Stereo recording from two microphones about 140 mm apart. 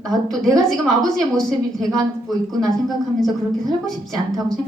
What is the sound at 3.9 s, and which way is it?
Speech, centre (ahead or behind).